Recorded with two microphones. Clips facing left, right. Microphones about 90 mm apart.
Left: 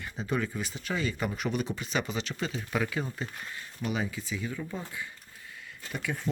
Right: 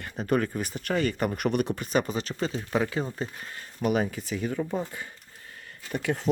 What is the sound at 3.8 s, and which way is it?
Speech, 55° right (ahead or behind).